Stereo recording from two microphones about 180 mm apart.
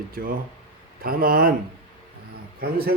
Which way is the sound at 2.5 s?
55° right (ahead or behind).